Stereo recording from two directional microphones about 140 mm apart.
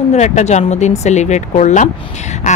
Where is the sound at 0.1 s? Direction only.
55° left (ahead or behind).